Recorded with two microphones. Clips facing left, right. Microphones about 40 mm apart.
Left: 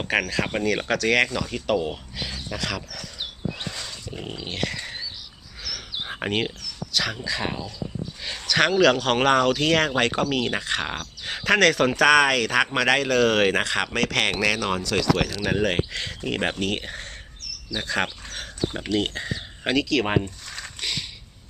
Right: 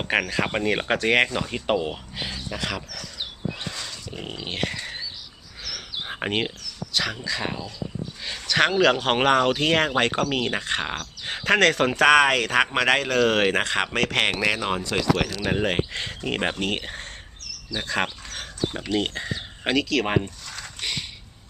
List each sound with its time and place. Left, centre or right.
0.3 s speech: right
2.6 s speech: centre
3.6 s pig: centre
4.2 s speech: centre
4.7 s a sound: centre
6.0 s a sound: centre
6.9 s speech: centre
13.7 s speech: centre
15.2 s speech: centre
15.4 s speech: centre
16.8 s speech: centre